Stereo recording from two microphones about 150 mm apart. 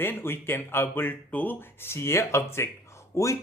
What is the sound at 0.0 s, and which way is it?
Speech, 15° left (ahead or behind).